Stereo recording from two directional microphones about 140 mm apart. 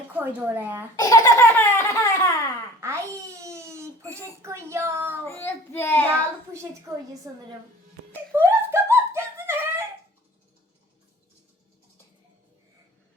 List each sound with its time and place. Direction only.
0.1 s a woman's voice: 10° right (ahead or behind)
0.9 s baby laughter: 25° left (ahead or behind)
2.8 s babbling: 20° right (ahead or behind)
4.4 s speech: 20° right (ahead or behind)
5.2 s child singing: 15° left (ahead or behind)
6.1 s a woman's voice: 20° right (ahead or behind)
8.4 s a sound: 15° right (ahead or behind)